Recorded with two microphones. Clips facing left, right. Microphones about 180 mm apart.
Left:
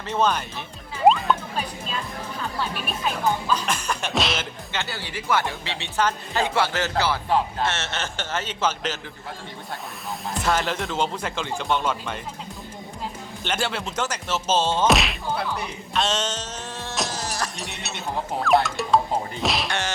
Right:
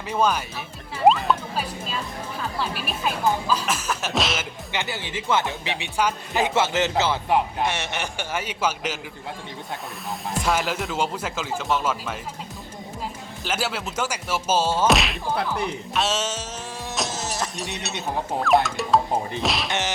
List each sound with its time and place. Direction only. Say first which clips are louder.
0.1 s speech: even; 10° right (ahead or behind)
1.0 s music: even; centre (ahead or behind)
3.5 s speech: even; 5° right (ahead or behind)
4.7 s speech: right 3 dB; 15° right (ahead or behind)
10.4 s speech: left 1 dB; 5° right (ahead or behind)
13.4 s speech: even; 5° right (ahead or behind)
17.1 s a sound: right 1 dB; 25° right (ahead or behind)
18.4 s speech: even; centre (ahead or behind)
19.6 s whack: right 1 dB; 20° right (ahead or behind)